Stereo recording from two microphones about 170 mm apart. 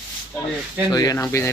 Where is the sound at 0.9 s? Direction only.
25° left (ahead or behind).